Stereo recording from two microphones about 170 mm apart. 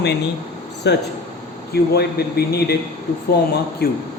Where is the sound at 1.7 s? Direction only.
70° left (ahead or behind).